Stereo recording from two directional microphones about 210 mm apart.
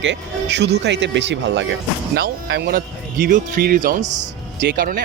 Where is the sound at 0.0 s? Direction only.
55° right (ahead or behind).